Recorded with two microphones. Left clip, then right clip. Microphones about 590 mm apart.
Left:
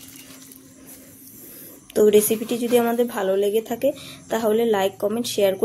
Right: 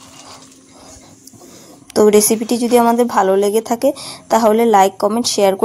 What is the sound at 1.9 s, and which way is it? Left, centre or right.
A woman's voice, centre.